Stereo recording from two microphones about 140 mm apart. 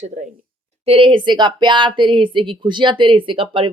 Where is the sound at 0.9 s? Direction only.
40° right (ahead or behind).